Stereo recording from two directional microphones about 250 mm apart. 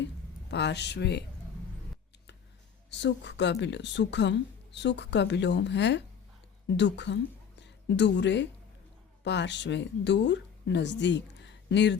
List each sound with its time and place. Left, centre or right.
0.5 s speech: left
2.9 s a woman's voice: left